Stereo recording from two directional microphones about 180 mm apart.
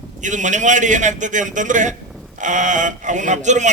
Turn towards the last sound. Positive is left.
turn(degrees=-40)  # may be behind; listen again after turning